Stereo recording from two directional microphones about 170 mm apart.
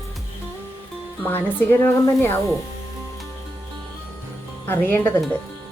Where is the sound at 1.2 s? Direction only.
10° left (ahead or behind).